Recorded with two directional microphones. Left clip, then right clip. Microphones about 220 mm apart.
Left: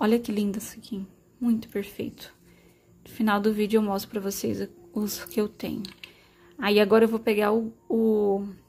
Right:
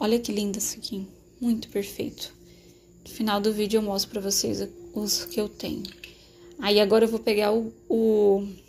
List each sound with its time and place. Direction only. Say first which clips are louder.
0.0 s a woman's voice: even; 30° left (ahead or behind)